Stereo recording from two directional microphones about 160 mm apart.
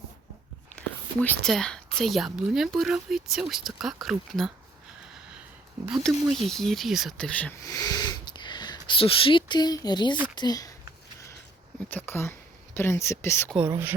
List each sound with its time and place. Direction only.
0.8 s speech: 10° left (ahead or behind)
6.0 s speech: centre (ahead or behind)
7.7 s speech: 20° left (ahead or behind)
11.9 s speech: 15° left (ahead or behind)
13.6 s speech: 15° right (ahead or behind)